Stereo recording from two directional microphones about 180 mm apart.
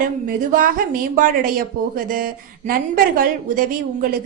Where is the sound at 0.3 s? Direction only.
50° right (ahead or behind).